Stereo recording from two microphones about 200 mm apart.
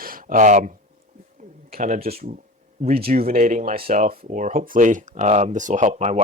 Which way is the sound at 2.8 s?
35° right (ahead or behind).